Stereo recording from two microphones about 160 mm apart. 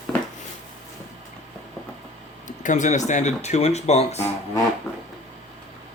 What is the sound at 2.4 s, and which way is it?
Speech, 50° left (ahead or behind).